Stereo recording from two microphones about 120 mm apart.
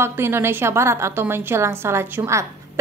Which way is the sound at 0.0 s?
20° right (ahead or behind).